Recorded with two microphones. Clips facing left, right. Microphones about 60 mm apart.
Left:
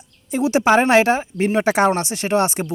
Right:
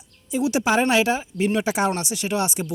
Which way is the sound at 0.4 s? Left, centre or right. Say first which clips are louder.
Left 5 dB; left.